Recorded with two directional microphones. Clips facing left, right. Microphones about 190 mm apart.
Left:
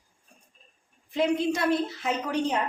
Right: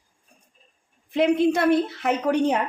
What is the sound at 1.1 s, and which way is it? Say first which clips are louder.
A woman's voice: right 6 dB; 60° right (ahead or behind).